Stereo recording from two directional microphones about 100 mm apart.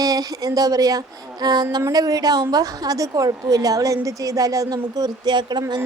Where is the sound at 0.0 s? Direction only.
40° right (ahead or behind).